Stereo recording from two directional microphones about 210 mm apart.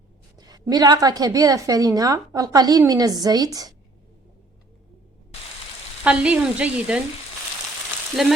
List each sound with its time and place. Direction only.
0.3 s a woman's voice: 20° right (ahead or behind)
6.0 s sizzle: 5° right (ahead or behind)
8.1 s sizzle: centre (ahead or behind)